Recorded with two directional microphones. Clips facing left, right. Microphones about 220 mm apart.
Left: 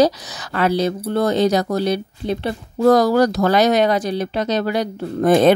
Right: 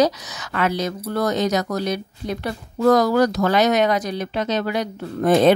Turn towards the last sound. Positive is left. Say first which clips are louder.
# left 2 dB
turn(degrees=45)  # may be behind; listen again after turning